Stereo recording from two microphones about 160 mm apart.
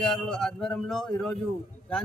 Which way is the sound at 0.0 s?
5° left (ahead or behind).